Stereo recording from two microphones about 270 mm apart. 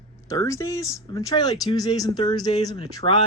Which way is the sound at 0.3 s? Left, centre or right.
Centre.